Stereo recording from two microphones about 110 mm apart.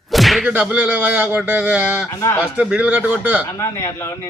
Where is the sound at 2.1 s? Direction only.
30° left (ahead or behind).